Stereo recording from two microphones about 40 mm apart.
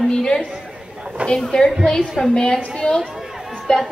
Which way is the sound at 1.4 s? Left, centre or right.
Centre.